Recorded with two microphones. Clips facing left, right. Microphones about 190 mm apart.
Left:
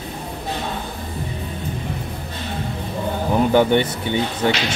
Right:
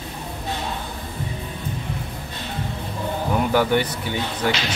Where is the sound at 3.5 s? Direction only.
25° left (ahead or behind).